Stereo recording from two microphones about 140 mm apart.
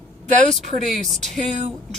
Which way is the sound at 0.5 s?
Centre (ahead or behind).